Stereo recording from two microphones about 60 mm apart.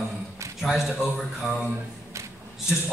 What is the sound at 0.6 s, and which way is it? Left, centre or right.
Speech, centre.